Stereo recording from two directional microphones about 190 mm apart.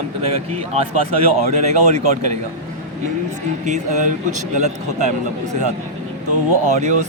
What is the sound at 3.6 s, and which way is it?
Speech, 40° right (ahead or behind).